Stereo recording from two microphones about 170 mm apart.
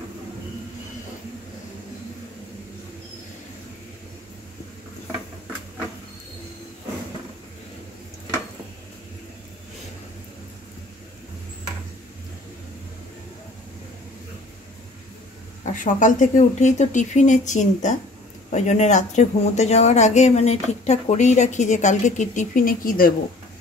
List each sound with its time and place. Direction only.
15.6 s speech: 50° left (ahead or behind)